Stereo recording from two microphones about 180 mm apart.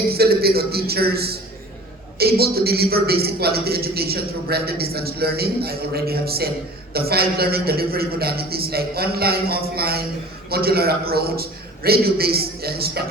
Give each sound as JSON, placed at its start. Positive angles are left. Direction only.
{"t": 0.1, "sound": "a man's voice", "side_deg": -60}